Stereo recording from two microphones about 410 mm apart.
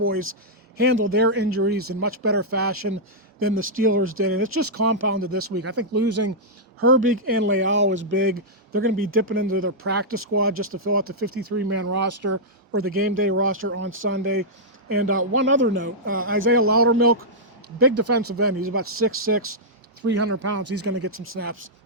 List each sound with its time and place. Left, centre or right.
0.0 s speech: right